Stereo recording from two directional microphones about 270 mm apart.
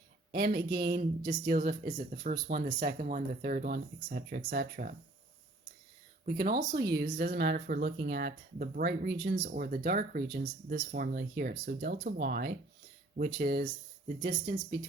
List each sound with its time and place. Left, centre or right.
0.3 s speech: right
6.2 s speech: right
14.6 s speech: centre